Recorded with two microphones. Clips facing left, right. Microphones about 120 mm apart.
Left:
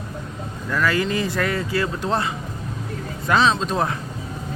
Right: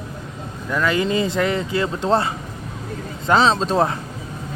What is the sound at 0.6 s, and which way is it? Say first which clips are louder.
Speech: right 2 dB; 20° right (ahead or behind).